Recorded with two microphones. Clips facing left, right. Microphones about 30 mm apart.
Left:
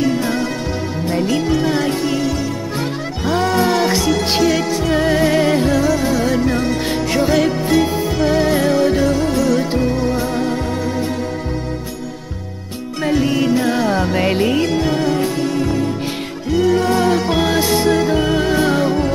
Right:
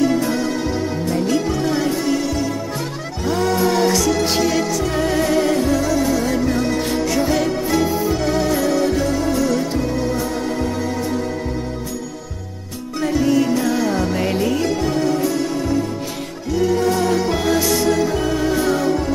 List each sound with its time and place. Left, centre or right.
1.0 s music: left
3.3 s music: left
13.0 s music: left
16.5 s music: left